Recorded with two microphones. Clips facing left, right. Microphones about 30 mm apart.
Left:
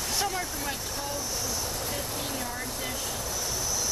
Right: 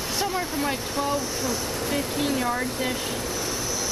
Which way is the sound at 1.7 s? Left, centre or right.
Right.